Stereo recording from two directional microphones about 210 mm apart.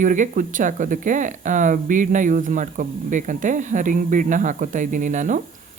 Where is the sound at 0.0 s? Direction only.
40° right (ahead or behind).